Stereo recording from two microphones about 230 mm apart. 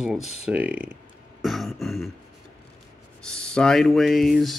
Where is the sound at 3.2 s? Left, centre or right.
Centre.